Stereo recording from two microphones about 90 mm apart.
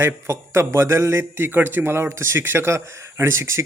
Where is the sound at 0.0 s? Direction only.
30° right (ahead or behind).